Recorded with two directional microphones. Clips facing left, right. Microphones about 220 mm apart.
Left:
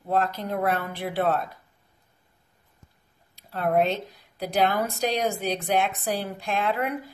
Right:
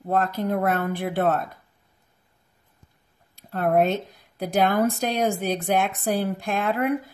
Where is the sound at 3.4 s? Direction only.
50° right (ahead or behind).